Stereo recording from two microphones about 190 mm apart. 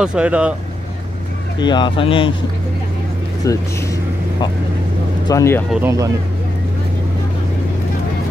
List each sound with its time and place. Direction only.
0.0 s speech: 5° right (ahead or behind)
1.6 s speech: 25° left (ahead or behind)
3.4 s speech: 15° left (ahead or behind)
5.7 s speech: 10° right (ahead or behind)